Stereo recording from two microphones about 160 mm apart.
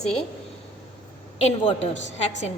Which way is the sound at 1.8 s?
45° left (ahead or behind).